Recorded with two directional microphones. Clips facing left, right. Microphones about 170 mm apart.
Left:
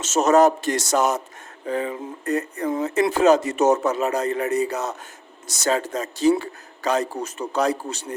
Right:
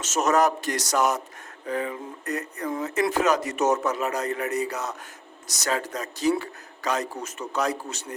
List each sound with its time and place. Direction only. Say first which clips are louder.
0.0 s speech: left 6 dB; 30° left (ahead or behind)